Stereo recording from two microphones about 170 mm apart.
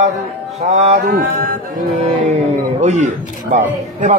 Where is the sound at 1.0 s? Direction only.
60° right (ahead or behind).